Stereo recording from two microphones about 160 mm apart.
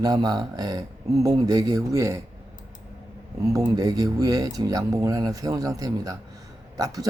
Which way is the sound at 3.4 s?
20° right (ahead or behind).